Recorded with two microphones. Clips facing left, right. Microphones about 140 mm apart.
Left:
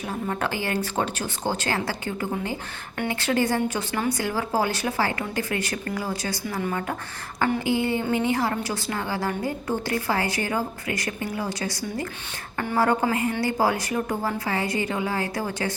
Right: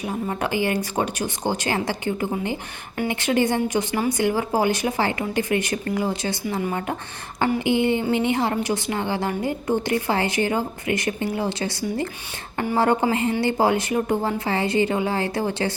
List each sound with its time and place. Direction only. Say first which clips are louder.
0.0 s a woman's voice: right 2 dB; 15° right (ahead or behind)